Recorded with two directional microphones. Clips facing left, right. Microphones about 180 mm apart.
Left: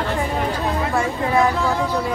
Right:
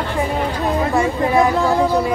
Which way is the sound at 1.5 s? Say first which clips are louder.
Right 5 dB; 35° right (ahead or behind).